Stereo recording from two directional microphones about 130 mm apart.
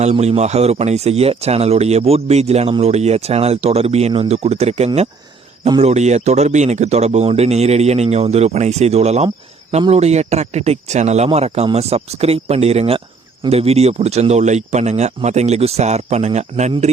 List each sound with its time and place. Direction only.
0.0 s speech: 55° right (ahead or behind)